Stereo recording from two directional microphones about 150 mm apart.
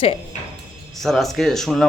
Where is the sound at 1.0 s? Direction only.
Centre (ahead or behind).